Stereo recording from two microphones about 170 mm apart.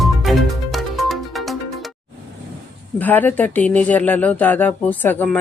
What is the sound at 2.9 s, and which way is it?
Speech, 10° left (ahead or behind).